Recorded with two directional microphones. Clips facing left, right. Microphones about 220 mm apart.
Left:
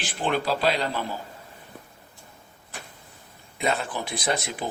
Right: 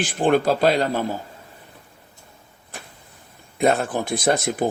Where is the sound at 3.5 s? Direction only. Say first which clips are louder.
Right 8 dB; 50° right (ahead or behind).